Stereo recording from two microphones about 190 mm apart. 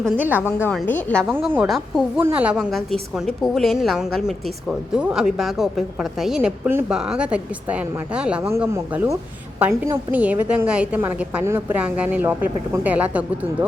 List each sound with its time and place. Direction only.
0.2 s a woman's voice: 10° right (ahead or behind)
0.6 s a woman's voice: 5° left (ahead or behind)
1.2 s a woman's voice: 10° right (ahead or behind)